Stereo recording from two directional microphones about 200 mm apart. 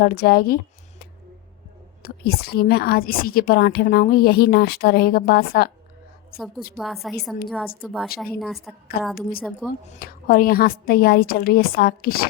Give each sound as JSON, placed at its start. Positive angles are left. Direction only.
{"t": 0.0, "sound": "a woman's voice", "side_deg": 50}
{"t": 6.7, "sound": "a woman's voice", "side_deg": 0}
{"t": 9.9, "sound": "a woman's voice", "side_deg": 45}